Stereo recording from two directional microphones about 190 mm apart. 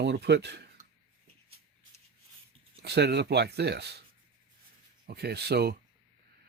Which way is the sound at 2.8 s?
60° right (ahead or behind).